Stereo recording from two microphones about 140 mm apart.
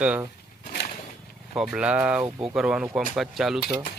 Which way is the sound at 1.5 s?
5° right (ahead or behind).